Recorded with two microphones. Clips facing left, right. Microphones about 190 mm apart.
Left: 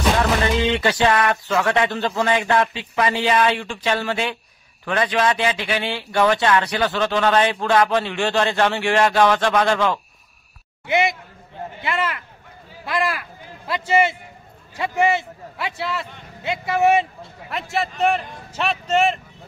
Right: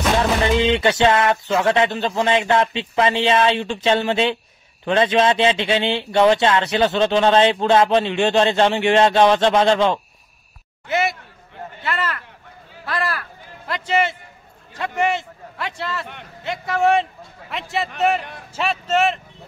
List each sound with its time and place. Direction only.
0.2 s speech: 20° right (ahead or behind)
10.9 s a man's voice: 15° left (ahead or behind); by 19.1 s centre (ahead or behind)